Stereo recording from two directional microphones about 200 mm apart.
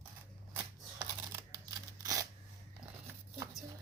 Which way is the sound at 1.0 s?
15° right (ahead or behind).